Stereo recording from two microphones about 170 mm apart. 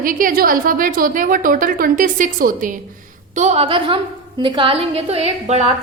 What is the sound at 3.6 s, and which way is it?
A woman's voice, 30° right (ahead or behind).